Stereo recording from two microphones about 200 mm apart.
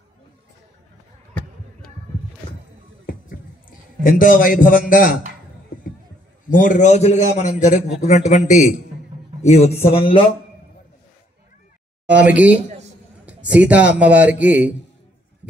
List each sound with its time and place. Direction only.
3.1 s a sound: 45° left (ahead or behind)
4.0 s a man's voice: 45° left (ahead or behind)
6.5 s a man's voice: 40° left (ahead or behind); by 10.2 s 25° left (ahead or behind)
12.1 s a man's voice: 5° right (ahead or behind)